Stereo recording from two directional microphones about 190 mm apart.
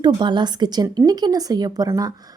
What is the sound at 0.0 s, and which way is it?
Speech, 25° right (ahead or behind).